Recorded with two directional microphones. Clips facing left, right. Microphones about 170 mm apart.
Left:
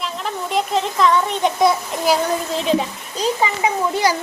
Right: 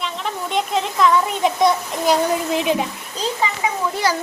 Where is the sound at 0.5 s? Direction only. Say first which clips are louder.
Left 2 dB; centre (ahead or behind).